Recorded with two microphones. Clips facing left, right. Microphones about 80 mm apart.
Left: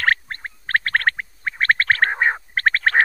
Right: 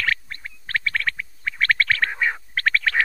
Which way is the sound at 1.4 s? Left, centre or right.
Left.